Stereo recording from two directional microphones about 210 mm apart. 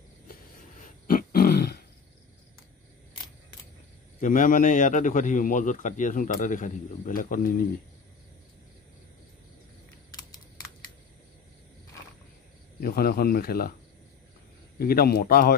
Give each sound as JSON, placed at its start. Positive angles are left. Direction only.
{"t": 0.7, "sound": "grunt", "side_deg": 40}
{"t": 4.2, "sound": "a man's voice", "side_deg": 40}
{"t": 12.8, "sound": "speech", "side_deg": 45}
{"t": 14.8, "sound": "speech", "side_deg": 45}